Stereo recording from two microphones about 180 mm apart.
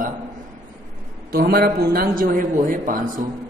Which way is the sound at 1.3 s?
55° right (ahead or behind).